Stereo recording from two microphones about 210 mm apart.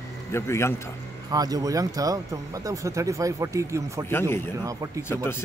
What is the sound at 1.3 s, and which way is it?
Speech, 20° right (ahead or behind).